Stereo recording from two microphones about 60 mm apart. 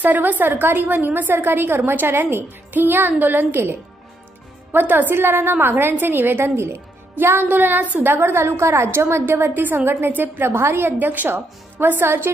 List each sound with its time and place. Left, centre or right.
0.0 s a woman's voice: right
4.7 s a woman's voice: right
10.5 s a woman's voice: right